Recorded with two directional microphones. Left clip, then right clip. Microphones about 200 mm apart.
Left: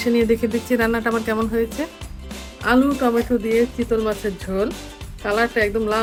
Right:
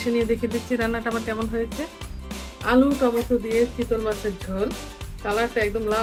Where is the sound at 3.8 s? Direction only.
Centre (ahead or behind).